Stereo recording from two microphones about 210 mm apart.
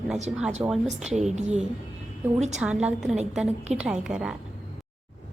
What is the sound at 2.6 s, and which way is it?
A woman's voice, 5° right (ahead or behind).